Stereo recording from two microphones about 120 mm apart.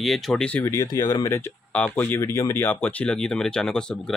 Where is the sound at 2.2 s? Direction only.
25° left (ahead or behind).